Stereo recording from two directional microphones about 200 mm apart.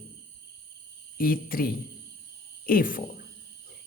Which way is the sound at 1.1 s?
45° left (ahead or behind).